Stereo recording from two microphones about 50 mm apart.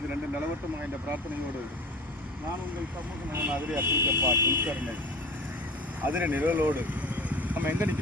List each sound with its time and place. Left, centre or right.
0.8 s speech: right
3.4 s speech: right
3.8 s speech: right
6.0 s speech: right